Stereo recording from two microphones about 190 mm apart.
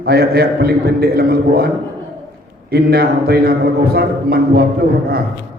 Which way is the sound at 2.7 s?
55° right (ahead or behind).